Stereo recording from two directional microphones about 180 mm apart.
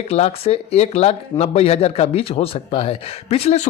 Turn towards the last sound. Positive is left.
turn(degrees=35)  # may be behind; listen again after turning